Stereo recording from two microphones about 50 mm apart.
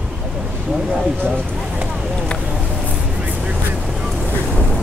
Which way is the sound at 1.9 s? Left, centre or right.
Centre.